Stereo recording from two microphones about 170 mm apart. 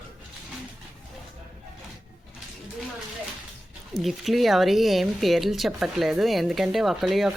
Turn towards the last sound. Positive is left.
turn(degrees=0)  # may be behind; listen again after turning